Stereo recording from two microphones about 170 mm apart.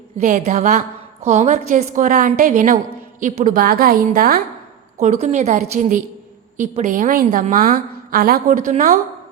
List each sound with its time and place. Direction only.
0.2 s a woman's voice: 45° right (ahead or behind)
4.9 s a woman's voice: 40° right (ahead or behind)